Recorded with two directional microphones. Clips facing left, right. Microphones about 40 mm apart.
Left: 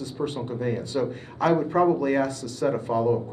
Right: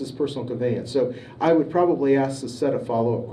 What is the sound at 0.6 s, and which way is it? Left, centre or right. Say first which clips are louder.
A man's voice: right 5 dB; right.